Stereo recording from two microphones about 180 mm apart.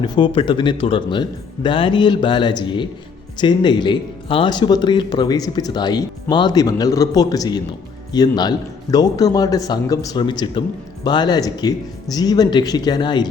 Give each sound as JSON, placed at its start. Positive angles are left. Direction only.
{"t": 0.0, "sound": "speech", "side_deg": 25}